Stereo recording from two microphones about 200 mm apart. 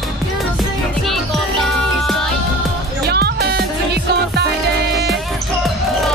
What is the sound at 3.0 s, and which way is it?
Music, 55° right (ahead or behind).